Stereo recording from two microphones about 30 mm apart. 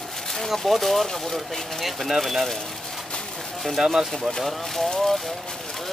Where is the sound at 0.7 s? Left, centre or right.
Centre.